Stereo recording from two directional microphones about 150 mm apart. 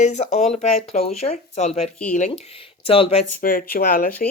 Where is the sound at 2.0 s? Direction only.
60° left (ahead or behind); by 3.2 s 40° left (ahead or behind).